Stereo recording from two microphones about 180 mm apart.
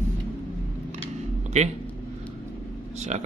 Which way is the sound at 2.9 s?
40° right (ahead or behind).